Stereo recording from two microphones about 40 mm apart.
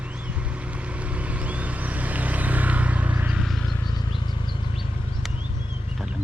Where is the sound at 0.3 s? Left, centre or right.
Right.